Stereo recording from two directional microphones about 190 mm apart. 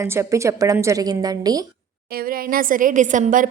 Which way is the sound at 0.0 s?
15° right (ahead or behind).